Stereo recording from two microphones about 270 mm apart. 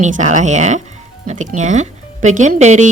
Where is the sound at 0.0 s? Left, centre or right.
Right.